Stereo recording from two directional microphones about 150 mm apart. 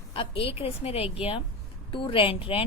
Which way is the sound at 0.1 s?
35° left (ahead or behind).